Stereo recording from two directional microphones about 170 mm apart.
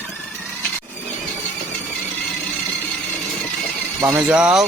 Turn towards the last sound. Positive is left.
turn(degrees=-5)  # may be behind; listen again after turning